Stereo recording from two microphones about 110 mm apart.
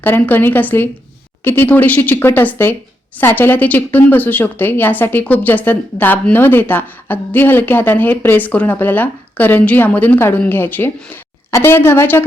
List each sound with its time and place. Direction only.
0.0 s a woman's voice: 15° left (ahead or behind)